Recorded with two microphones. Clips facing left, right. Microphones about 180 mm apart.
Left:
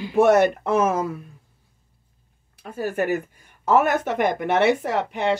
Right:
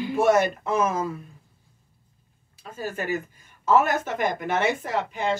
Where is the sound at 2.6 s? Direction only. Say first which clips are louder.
Left 7 dB; 60° left (ahead or behind).